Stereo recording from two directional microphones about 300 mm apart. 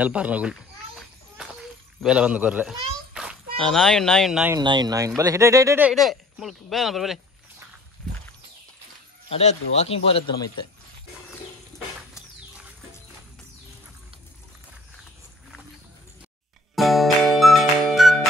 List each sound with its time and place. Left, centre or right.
0.0 s children playing: centre
2.0 s a man's voice: centre
4.6 s speech: centre
9.3 s a man's voice: left
16.7 s music: centre